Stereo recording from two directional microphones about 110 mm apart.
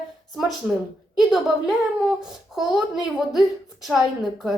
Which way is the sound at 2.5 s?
5° right (ahead or behind).